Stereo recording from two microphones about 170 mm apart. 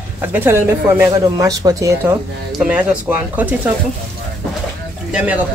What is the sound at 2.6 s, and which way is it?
Speech, 10° right (ahead or behind).